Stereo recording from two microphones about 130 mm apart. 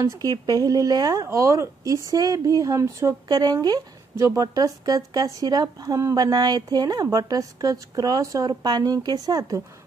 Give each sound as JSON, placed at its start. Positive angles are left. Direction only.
{"t": 0.0, "sound": "speech", "side_deg": -25}